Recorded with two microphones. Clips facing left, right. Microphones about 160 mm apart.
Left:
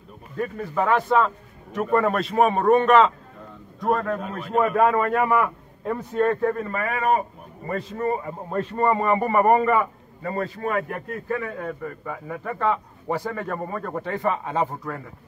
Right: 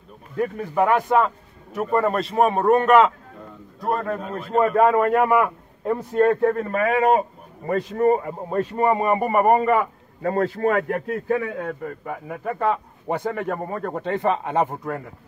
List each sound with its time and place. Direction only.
0.4 s a man's voice: 15° right (ahead or behind)
4.9 s a man's voice: 10° right (ahead or behind)
6.8 s a man's voice: 80° right
7.6 s a man's voice: 20° right (ahead or behind)
10.2 s a man's voice: 60° right (ahead or behind)
11.3 s a man's voice: 25° right (ahead or behind)